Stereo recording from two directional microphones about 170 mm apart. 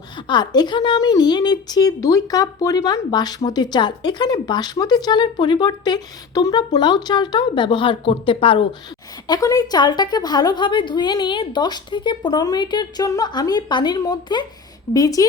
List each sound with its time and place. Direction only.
0.3 s speech: 25° left (ahead or behind)